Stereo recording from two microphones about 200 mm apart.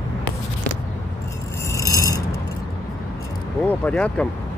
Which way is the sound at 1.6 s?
15° left (ahead or behind).